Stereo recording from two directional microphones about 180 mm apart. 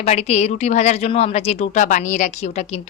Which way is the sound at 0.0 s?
35° left (ahead or behind).